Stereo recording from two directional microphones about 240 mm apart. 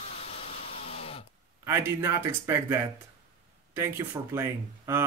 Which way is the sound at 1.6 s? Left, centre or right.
Centre.